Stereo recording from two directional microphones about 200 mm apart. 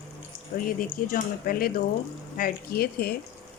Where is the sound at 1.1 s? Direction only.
45° left (ahead or behind).